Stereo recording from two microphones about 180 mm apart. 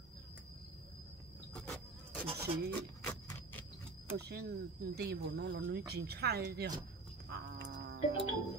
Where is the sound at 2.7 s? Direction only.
15° left (ahead or behind).